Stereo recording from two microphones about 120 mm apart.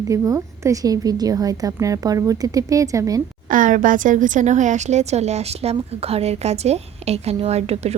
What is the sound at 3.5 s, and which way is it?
A woman's voice, 90° right.